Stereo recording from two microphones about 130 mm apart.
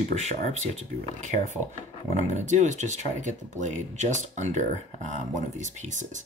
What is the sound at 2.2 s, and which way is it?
Speech, 65° right (ahead or behind).